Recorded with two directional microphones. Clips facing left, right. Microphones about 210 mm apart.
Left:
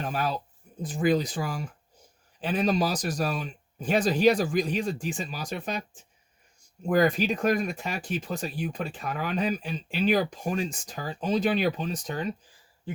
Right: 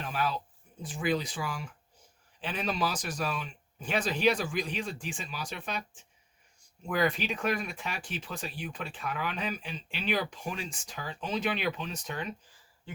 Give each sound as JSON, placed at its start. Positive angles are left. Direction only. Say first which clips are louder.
{"t": 0.0, "sound": "a sound", "louder": "left 3 dB", "side_deg": 45}
{"t": 2.4, "sound": "speech", "louder": "left 7 dB", "side_deg": 40}
{"t": 6.8, "sound": "speech", "louder": "left 7 dB", "side_deg": 40}